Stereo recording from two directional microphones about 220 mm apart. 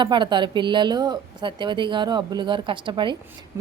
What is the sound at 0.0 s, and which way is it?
A woman's voice, 20° right (ahead or behind).